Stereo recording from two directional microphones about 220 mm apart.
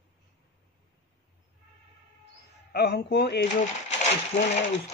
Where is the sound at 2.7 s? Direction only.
45° left (ahead or behind).